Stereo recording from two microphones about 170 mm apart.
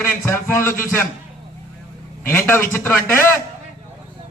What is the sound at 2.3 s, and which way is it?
A man's voice, 15° left (ahead or behind).